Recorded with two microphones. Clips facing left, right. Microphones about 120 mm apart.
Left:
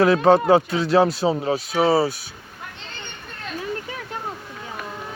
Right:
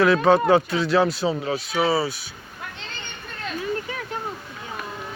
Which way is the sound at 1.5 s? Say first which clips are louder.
Left 3 dB; 45° left (ahead or behind).